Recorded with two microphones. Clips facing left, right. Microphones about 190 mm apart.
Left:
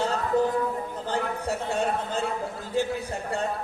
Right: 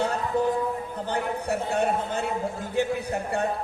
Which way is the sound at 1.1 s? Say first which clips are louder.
Right 1 dB; 60° right (ahead or behind).